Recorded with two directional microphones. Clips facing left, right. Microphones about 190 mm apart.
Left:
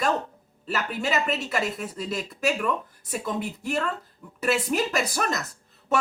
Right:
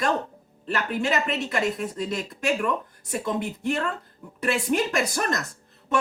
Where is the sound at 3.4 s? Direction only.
5° left (ahead or behind).